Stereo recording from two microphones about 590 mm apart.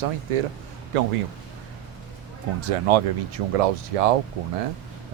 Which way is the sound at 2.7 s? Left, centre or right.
Right.